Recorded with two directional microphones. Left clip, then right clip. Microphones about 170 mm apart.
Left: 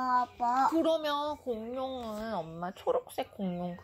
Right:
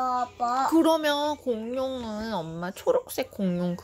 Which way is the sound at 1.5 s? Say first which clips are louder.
Right 7 dB; 45° right (ahead or behind).